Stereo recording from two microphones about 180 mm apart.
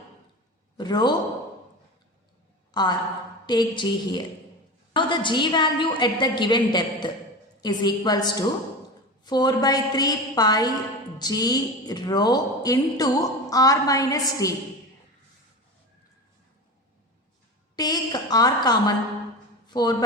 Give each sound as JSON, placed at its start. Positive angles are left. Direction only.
{"t": 0.8, "sound": "a man's voice", "side_deg": 25}
{"t": 2.7, "sound": "a woman's voice", "side_deg": 25}
{"t": 17.7, "sound": "a woman's voice", "side_deg": 20}